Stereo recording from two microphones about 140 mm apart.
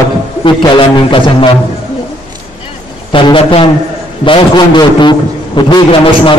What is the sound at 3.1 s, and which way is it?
A man's voice, 35° left (ahead or behind).